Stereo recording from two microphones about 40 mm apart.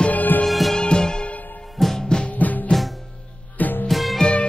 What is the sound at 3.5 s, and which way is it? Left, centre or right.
Music, left.